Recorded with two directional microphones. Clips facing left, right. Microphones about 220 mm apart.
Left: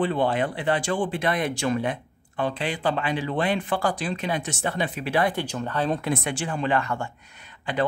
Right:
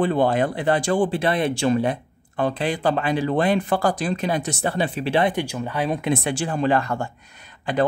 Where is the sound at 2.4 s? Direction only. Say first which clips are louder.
Right 4 dB; 40° right (ahead or behind); by 6.1 s 10° right (ahead or behind).